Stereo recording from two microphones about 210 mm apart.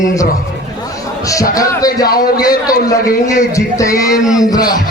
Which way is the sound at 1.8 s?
45° left (ahead or behind).